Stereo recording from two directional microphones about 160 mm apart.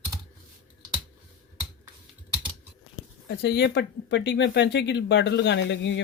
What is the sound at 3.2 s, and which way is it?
Speech, 90° left.